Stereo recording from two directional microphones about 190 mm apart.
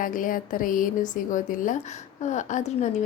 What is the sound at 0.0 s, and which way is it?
A woman's voice, 45° left (ahead or behind).